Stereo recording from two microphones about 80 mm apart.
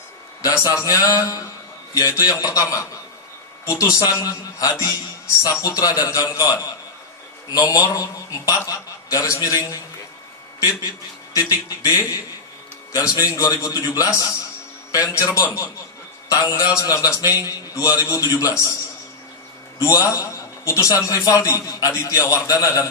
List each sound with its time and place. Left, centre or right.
0.4 s a man's voice: left
11.8 s a man's voice: left
19.8 s a man's voice: left